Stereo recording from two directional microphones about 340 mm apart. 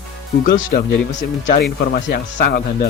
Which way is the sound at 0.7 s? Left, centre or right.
Left.